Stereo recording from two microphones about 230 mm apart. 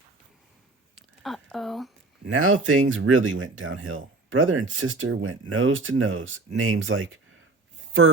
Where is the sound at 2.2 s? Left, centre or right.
Right.